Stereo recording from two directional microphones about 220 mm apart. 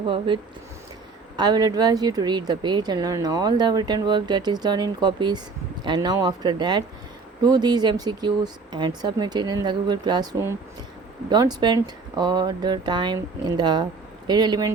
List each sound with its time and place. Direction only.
1.4 s a woman's voice: 20° right (ahead or behind)